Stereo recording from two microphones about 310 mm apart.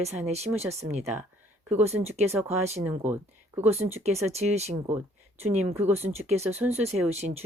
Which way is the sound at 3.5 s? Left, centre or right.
Right.